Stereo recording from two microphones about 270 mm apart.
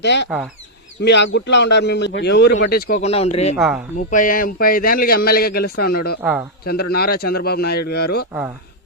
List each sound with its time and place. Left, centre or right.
0.0 s a man's voice: left
3.5 s speech: centre
3.9 s a man's voice: left